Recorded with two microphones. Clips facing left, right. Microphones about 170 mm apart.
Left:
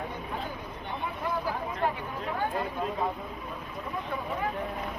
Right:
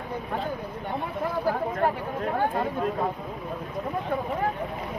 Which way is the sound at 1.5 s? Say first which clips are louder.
Right 5 dB; 50° right (ahead or behind).